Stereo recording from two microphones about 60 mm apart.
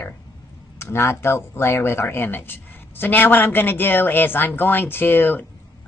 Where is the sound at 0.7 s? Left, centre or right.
Left.